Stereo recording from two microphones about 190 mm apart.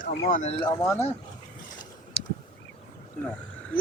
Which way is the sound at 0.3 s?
45° left (ahead or behind).